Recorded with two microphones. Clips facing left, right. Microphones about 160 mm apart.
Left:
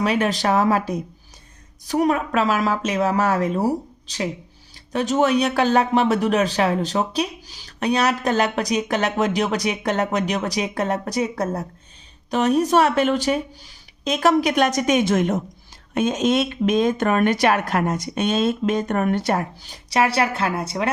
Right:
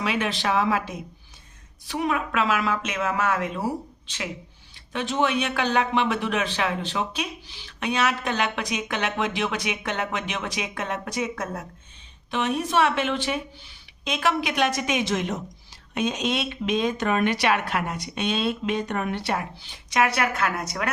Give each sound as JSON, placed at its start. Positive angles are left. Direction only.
{"t": 0.0, "sound": "speech", "side_deg": 40}